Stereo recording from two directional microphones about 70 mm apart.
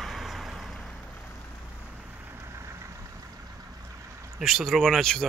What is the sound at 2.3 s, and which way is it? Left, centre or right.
Vehicle, right.